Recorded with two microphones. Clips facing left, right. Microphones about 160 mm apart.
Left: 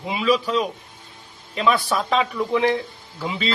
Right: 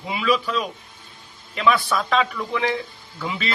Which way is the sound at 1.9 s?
15° left (ahead or behind).